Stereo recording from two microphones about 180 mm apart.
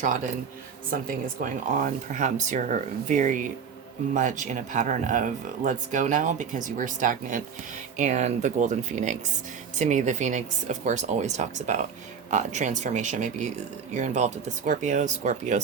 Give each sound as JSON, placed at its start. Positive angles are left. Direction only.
{"t": 0.9, "sound": "speech", "side_deg": -50}